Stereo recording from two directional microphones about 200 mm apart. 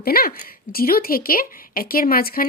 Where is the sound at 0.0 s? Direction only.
50° left (ahead or behind).